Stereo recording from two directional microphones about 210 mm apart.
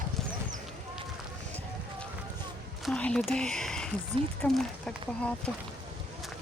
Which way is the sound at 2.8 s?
5° left (ahead or behind).